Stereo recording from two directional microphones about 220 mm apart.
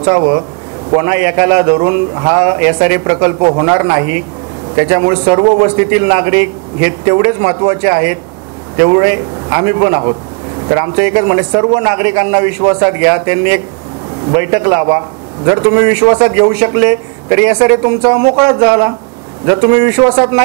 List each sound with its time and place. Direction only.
0.0 s a man's voice: 15° right (ahead or behind)